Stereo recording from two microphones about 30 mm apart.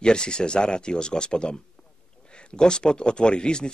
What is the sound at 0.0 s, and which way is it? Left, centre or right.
Speech, left.